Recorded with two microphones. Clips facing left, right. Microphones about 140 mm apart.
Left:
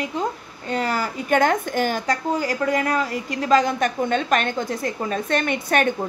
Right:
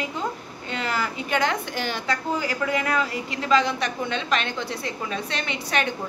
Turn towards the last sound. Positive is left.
turn(degrees=50)  # may be behind; listen again after turning